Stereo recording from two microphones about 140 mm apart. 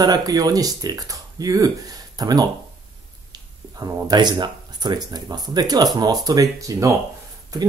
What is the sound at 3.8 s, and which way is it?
Speech, 30° right (ahead or behind).